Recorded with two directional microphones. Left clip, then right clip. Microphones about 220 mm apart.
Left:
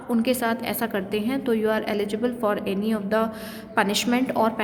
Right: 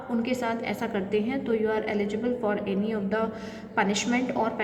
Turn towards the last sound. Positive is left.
turn(degrees=50)  # may be behind; listen again after turning